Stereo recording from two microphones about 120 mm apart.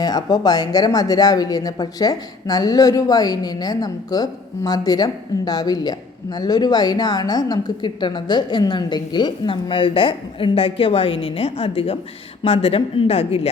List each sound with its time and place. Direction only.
0.0 s speech: 35° left (ahead or behind); by 13.5 s 60° left (ahead or behind)